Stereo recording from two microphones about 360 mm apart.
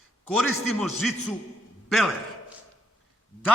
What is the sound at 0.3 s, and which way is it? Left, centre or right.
A man's voice, centre.